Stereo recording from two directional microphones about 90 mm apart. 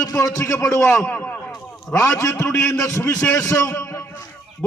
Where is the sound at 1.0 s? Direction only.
20° left (ahead or behind).